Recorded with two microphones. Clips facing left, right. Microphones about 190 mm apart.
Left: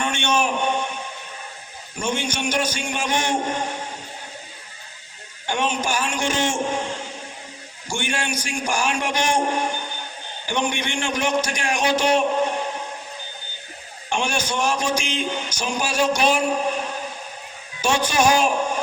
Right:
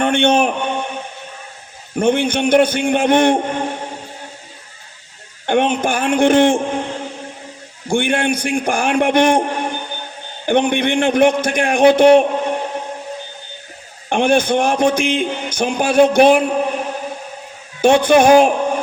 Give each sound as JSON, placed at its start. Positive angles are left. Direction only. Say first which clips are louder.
{"t": 0.0, "sound": "a sound", "louder": "right 8 dB", "side_deg": -60}
{"t": 2.0, "sound": "speech", "louder": "right 10 dB", "side_deg": -60}
{"t": 5.5, "sound": "speech", "louder": "right 8 dB", "side_deg": -55}
{"t": 14.1, "sound": "speech", "louder": "right 10 dB", "side_deg": -55}
{"t": 17.7, "sound": "speech", "louder": "right 10 dB", "side_deg": -55}